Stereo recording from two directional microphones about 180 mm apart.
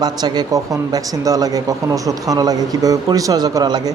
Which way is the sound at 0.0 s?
20° right (ahead or behind).